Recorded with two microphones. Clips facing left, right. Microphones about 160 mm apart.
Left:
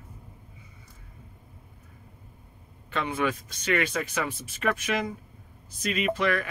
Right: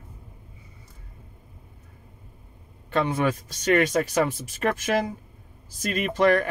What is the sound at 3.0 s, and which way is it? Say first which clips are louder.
Speech: right 4 dB; 40° right (ahead or behind).